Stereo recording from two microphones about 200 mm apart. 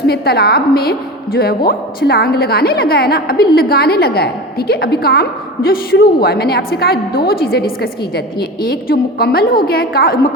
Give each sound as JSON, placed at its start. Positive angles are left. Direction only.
{"t": 0.1, "sound": "a woman's voice", "side_deg": 50}